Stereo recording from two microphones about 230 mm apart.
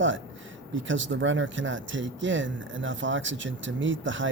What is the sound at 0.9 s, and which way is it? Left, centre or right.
Speech, right.